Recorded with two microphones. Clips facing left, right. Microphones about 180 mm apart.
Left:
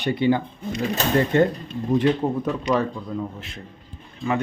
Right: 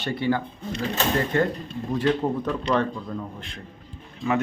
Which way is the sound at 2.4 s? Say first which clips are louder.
Left 2 dB; 10° left (ahead or behind).